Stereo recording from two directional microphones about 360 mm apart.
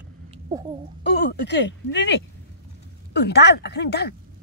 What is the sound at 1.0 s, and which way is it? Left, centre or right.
Speech, left.